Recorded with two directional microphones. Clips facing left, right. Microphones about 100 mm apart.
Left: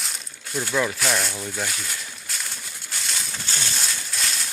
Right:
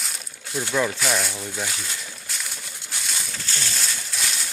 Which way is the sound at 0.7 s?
5° right (ahead or behind).